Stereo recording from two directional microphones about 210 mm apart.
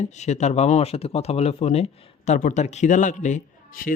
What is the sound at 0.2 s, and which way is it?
Speech, 35° left (ahead or behind).